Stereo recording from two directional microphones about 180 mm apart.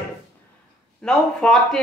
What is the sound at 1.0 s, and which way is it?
Speech, 5° left (ahead or behind).